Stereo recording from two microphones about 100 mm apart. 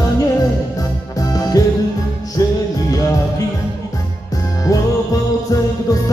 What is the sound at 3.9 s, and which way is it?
Music, 35° left (ahead or behind).